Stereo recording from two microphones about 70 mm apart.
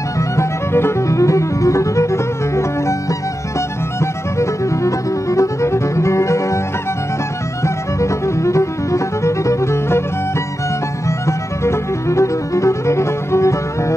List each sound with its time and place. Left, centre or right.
0.4 s music: left
7.6 s music: left
11.1 s music: left